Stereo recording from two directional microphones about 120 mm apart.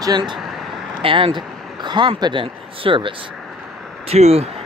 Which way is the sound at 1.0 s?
45° right (ahead or behind).